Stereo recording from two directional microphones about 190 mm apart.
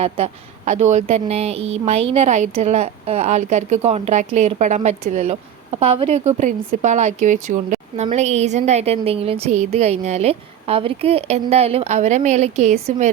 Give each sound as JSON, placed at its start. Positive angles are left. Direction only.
{"t": 0.0, "sound": "a woman's voice", "side_deg": -35}